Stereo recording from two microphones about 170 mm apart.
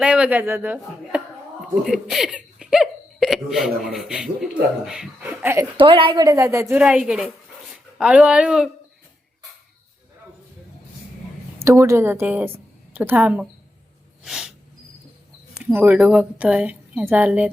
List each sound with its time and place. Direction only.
0.0 s a woman's voice: 5° right (ahead or behind)
5.7 s a woman's voice: 30° right (ahead or behind); by 8.7 s 5° right (ahead or behind)
11.6 s a woman's voice: 15° right (ahead or behind)
14.3 s a sound: 5° right (ahead or behind)
15.5 s a woman's voice: 10° right (ahead or behind)